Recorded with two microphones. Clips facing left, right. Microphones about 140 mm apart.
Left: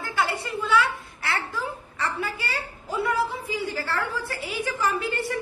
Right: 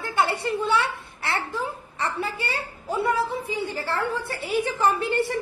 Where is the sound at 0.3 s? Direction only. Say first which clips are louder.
Right 3 dB; 30° right (ahead or behind).